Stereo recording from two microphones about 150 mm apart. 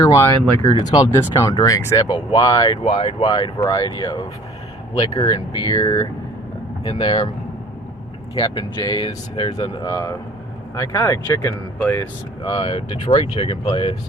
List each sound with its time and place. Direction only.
0.0 s speech: 20° left (ahead or behind)
8.4 s speech: 30° left (ahead or behind)
12.4 s speech: 35° left (ahead or behind)